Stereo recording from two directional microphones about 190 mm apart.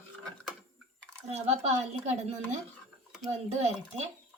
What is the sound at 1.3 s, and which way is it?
Speech, 35° right (ahead or behind).